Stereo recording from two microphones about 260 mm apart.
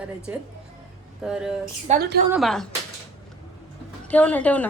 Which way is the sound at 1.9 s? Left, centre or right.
Right.